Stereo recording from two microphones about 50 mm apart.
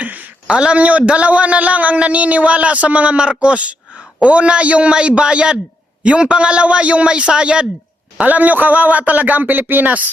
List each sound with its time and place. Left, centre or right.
0.0 s a sound: right
0.4 s a man's voice: right
8.2 s a man's voice: right